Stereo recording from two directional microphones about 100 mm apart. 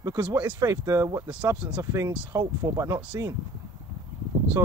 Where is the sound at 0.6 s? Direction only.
30° right (ahead or behind).